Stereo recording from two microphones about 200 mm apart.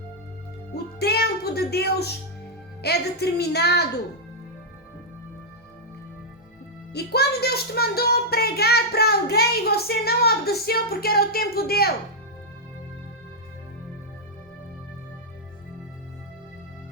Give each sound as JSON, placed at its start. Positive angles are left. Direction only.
{"t": 0.9, "sound": "music", "side_deg": 55}
{"t": 2.8, "sound": "a woman's voice", "side_deg": 55}
{"t": 6.9, "sound": "music", "side_deg": 55}